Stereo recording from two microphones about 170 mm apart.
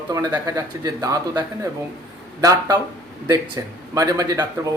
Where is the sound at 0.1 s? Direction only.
20° right (ahead or behind).